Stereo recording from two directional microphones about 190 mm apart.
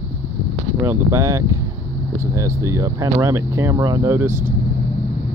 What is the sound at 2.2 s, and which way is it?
Speech, 15° right (ahead or behind).